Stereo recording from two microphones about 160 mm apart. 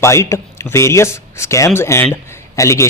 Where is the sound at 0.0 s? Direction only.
15° left (ahead or behind).